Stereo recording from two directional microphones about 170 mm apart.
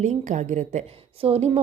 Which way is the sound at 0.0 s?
45° right (ahead or behind).